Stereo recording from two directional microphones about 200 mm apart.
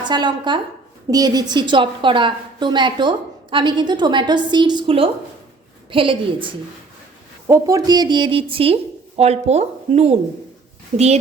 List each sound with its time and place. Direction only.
0.0 s a woman's voice: 20° right (ahead or behind)
7.4 s a woman's voice: 15° right (ahead or behind); by 11.2 s 30° right (ahead or behind)